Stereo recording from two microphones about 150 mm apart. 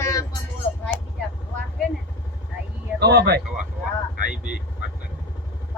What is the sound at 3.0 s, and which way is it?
Speech, 90° right.